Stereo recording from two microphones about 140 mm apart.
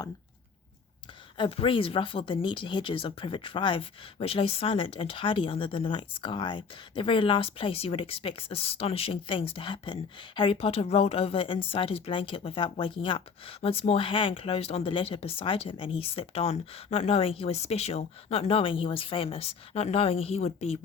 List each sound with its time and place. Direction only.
1.4 s speech: 40° left (ahead or behind)